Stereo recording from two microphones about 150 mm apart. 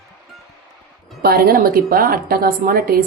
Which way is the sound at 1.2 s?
90° right.